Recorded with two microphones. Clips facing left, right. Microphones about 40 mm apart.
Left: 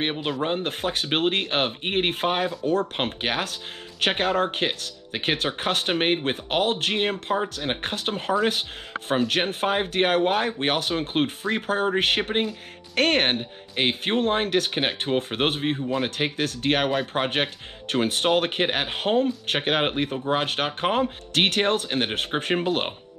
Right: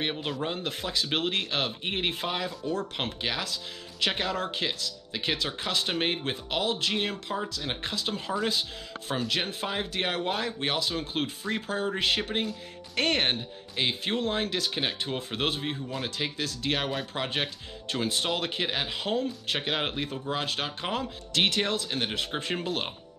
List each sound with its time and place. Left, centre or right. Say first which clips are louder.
0.0 s speech: left 5 dB; left